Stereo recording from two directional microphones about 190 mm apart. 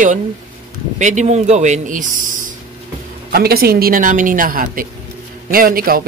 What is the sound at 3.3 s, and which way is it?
A woman's voice, 55° right (ahead or behind).